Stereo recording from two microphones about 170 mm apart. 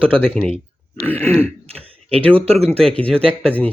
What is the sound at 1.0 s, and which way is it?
Speech, 10° left (ahead or behind).